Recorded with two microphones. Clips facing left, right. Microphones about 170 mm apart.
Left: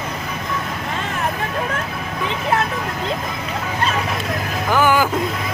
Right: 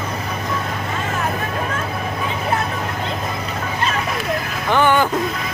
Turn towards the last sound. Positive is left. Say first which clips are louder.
# even
turn(degrees=5)  # may be behind; listen again after turning